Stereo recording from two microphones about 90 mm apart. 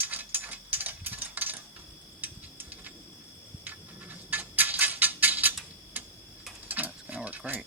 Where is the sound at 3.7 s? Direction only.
20° right (ahead or behind).